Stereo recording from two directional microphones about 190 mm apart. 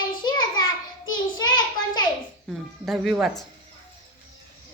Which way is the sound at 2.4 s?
Centre (ahead or behind).